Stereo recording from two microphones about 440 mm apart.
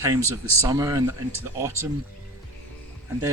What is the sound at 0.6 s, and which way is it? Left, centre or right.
Speech, centre.